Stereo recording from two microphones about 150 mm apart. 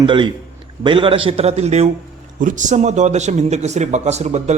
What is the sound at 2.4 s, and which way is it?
Speech, 55° right (ahead or behind).